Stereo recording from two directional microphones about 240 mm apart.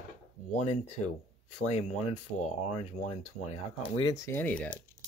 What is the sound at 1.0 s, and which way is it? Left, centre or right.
Speech, left.